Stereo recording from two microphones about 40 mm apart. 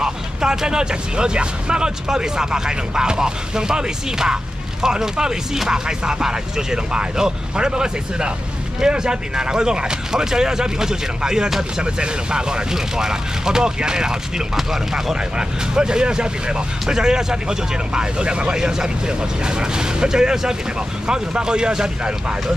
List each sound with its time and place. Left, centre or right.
0.0 s speech: centre
14.6 s speech: centre
15.1 s speech: centre